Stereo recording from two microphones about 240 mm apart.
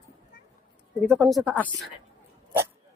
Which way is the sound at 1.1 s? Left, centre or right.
Centre.